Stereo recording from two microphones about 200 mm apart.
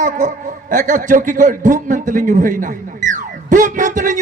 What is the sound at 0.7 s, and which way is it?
A man's voice, 40° right (ahead or behind).